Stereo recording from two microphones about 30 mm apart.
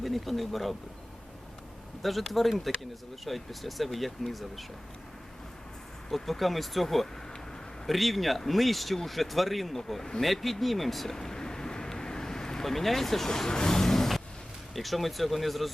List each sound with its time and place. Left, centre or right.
0.0 s speech: centre
2.0 s speech: centre
6.1 s speech: centre
10.2 s a sound: centre; by 12.6 s left
12.6 s speech: centre
13.3 s vehicle: left
14.7 s speech: centre